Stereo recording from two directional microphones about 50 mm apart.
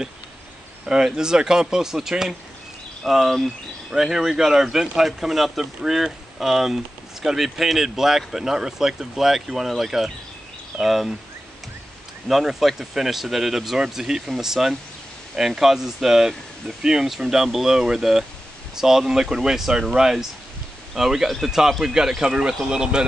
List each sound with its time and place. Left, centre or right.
0.8 s speech: centre
12.3 s speech: centre